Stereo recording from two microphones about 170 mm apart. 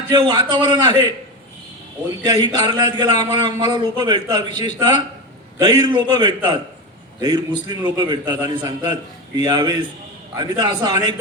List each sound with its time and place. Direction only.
0.1 s a man's voice: 25° right (ahead or behind)
2.2 s a man's voice: 25° right (ahead or behind)